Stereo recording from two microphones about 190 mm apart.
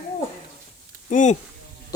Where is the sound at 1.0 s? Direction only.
40° left (ahead or behind).